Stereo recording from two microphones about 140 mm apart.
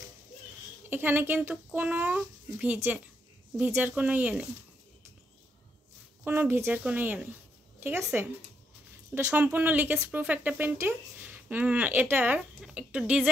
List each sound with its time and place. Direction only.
0.8 s speech: 15° right (ahead or behind)
6.2 s speech: 15° right (ahead or behind)